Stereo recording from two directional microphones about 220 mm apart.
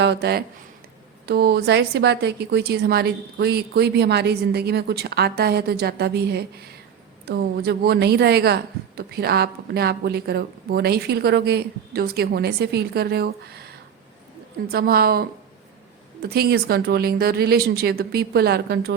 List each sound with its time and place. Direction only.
0.0 s a woman's voice: 50° right (ahead or behind)
14.7 s a woman's voice: 45° right (ahead or behind)
16.3 s a woman's voice: 45° right (ahead or behind)